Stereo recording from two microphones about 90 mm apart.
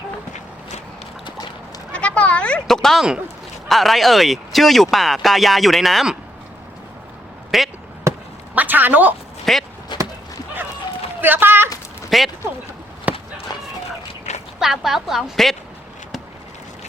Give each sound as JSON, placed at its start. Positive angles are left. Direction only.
{"t": 1.9, "sound": "a sound", "side_deg": 15}
{"t": 3.7, "sound": "speech", "side_deg": 0}
{"t": 7.5, "sound": "speech", "side_deg": 0}
{"t": 8.1, "sound": "basketball bounce", "side_deg": -30}
{"t": 8.5, "sound": "speech", "side_deg": -20}
{"t": 9.5, "sound": "speech", "side_deg": 5}
{"t": 9.9, "sound": "chop", "side_deg": 60}
{"t": 11.2, "sound": "speech", "side_deg": -20}
{"t": 12.1, "sound": "speech", "side_deg": 0}
{"t": 13.1, "sound": "a sound", "side_deg": -15}
{"t": 14.6, "sound": "speech", "side_deg": -5}